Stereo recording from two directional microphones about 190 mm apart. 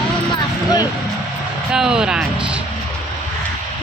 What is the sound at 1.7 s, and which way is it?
Speech, 5° right (ahead or behind).